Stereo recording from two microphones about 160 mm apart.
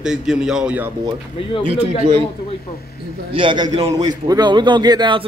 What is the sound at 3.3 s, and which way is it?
A man's voice, 30° right (ahead or behind).